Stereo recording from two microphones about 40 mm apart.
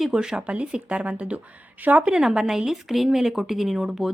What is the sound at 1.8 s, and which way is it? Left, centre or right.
Speech, right.